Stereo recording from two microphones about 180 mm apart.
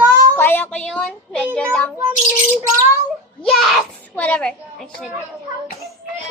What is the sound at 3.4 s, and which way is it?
A child's voice, centre (ahead or behind).